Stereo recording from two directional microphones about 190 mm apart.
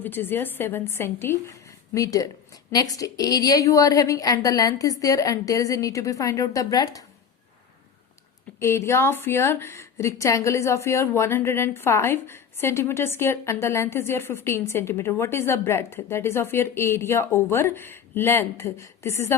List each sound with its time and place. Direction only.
0.0 s a woman's voice: 10° left (ahead or behind)
8.5 s a woman's voice: 15° left (ahead or behind)